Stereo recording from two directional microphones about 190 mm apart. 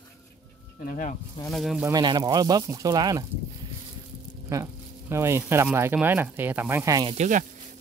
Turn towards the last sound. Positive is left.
turn(degrees=-40)  # may be behind; listen again after turning